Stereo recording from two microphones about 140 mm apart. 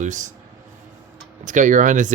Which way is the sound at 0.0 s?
60° right (ahead or behind).